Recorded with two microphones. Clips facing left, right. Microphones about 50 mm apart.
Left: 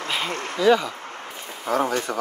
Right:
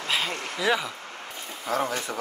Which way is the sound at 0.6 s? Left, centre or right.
Centre.